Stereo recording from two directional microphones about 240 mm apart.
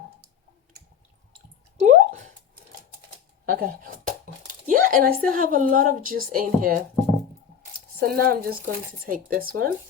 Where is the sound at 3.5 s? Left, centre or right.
Right.